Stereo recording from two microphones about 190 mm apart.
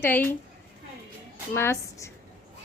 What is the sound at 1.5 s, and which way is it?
Speech, 15° left (ahead or behind).